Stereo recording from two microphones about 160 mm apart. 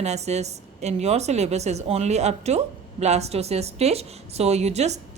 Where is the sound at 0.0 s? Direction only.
45° right (ahead or behind).